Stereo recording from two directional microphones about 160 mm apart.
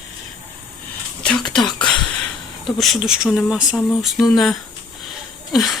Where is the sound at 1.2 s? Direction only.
5° left (ahead or behind).